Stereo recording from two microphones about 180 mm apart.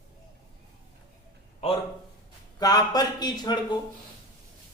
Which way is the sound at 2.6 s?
20° left (ahead or behind).